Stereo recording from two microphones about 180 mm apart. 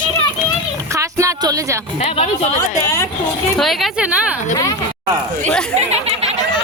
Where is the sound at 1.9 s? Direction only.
35° left (ahead or behind).